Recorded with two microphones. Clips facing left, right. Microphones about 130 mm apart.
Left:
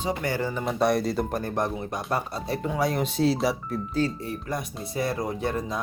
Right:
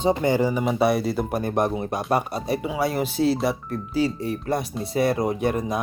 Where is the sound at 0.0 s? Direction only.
25° right (ahead or behind).